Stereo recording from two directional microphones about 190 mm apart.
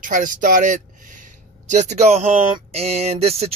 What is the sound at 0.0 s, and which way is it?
Speech, 45° right (ahead or behind).